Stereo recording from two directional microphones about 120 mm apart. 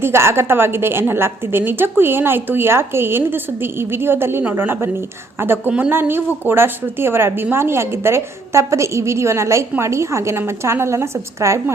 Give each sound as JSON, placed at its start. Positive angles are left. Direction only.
{"t": 0.0, "sound": "a woman's voice", "side_deg": -20}